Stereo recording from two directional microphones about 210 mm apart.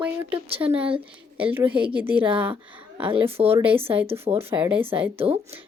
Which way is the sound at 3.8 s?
10° right (ahead or behind).